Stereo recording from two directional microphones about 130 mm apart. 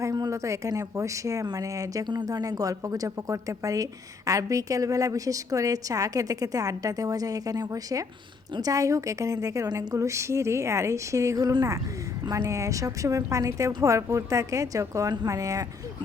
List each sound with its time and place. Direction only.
0.0 s speech: 25° right (ahead or behind)